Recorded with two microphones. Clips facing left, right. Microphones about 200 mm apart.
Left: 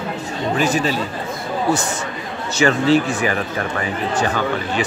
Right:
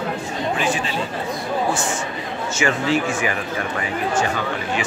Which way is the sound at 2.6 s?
35° left (ahead or behind).